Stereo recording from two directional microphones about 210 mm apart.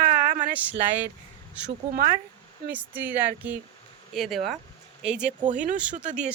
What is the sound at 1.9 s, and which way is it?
Speech, 45° right (ahead or behind).